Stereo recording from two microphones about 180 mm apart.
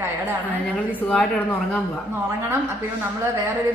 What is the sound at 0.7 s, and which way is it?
Speech, 5° left (ahead or behind).